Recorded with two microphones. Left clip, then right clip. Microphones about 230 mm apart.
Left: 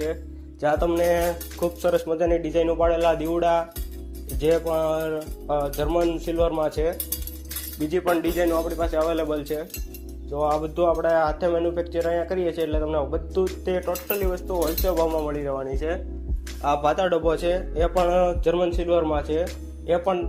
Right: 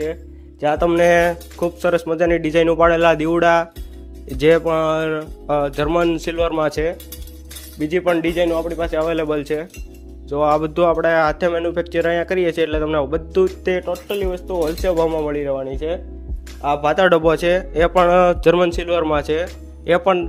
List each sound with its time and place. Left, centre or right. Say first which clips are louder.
0.6 s speech: right 6 dB; right
13.8 s speech: right 4 dB; right